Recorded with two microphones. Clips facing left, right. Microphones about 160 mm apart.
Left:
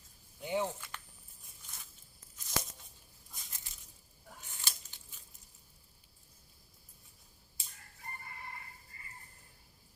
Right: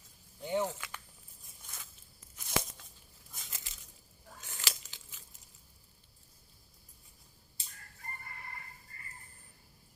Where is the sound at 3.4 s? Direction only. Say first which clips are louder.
Right 7 dB; 90° right.